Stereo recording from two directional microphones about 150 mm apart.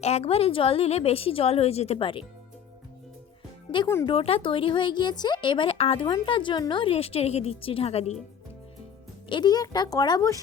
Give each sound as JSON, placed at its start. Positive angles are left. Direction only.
{"t": 0.0, "sound": "speech", "side_deg": 45}
{"t": 4.0, "sound": "speech", "side_deg": 40}
{"t": 9.3, "sound": "speech", "side_deg": 25}